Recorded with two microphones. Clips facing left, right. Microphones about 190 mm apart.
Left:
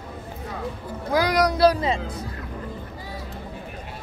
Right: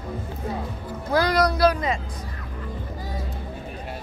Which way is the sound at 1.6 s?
30° left (ahead or behind).